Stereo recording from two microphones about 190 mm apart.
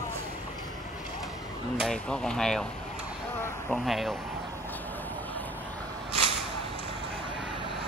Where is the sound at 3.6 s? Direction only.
Centre (ahead or behind).